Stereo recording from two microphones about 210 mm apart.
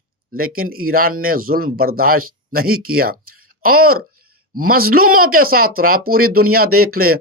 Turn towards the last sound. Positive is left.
turn(degrees=-90)